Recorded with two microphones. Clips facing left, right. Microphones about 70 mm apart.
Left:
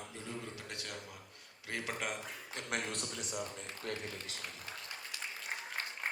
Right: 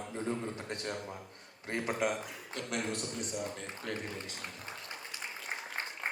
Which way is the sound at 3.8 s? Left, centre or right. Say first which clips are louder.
Right 2 dB; right.